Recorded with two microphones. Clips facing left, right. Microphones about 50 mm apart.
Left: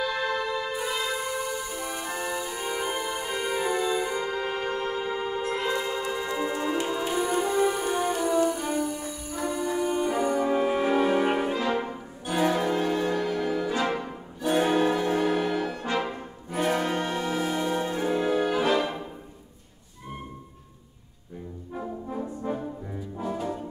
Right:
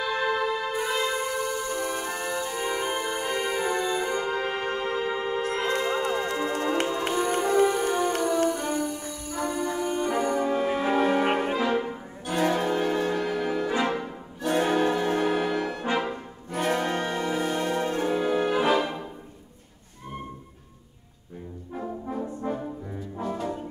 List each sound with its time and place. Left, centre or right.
0.0 s music: centre
6.0 s tick-tock: right
6.3 s tick-tock: centre
7.2 s music: centre
10.9 s brass instrument: centre
11.9 s music: centre
16.0 s brass instrument: centre
18.6 s music: centre
22.5 s brass instrument: centre